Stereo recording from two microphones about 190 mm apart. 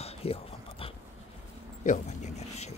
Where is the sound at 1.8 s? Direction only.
40° left (ahead or behind).